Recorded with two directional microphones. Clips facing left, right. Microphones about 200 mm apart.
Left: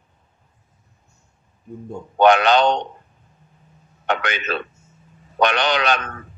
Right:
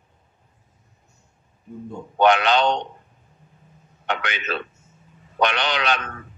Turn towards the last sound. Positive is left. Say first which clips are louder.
# left 4 dB
turn(degrees=45)  # may be behind; listen again after turning